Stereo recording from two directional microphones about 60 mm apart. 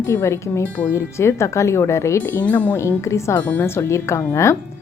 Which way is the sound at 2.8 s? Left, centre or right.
Left.